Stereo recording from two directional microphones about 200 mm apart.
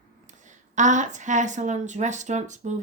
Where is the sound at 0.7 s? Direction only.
40° right (ahead or behind).